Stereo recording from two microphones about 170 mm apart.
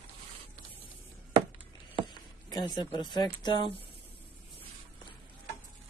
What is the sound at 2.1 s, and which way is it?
Speech, 25° left (ahead or behind).